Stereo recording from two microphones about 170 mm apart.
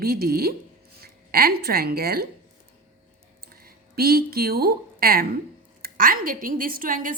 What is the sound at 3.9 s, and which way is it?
A woman's voice, 65° right (ahead or behind).